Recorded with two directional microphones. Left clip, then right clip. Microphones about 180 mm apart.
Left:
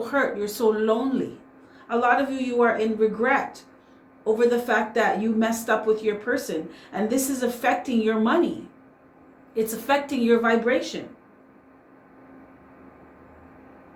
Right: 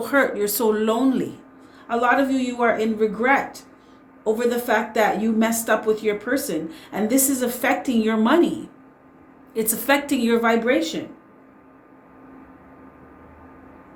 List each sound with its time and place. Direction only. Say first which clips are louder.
0.0 s speech: right 4 dB; 45° right (ahead or behind)
9.6 s speech: right 2 dB; 45° right (ahead or behind)